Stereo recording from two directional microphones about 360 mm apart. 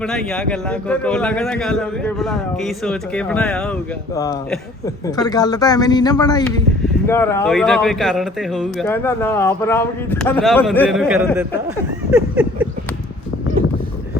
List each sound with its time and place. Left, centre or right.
0.0 s a man's voice: centre